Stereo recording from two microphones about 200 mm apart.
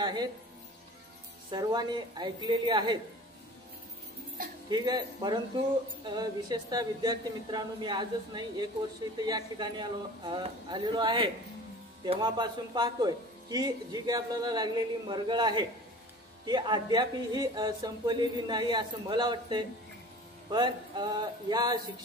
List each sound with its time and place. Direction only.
0.0 s speech: 20° right (ahead or behind)
1.5 s speech: 20° right (ahead or behind)
4.6 s speech: 20° right (ahead or behind)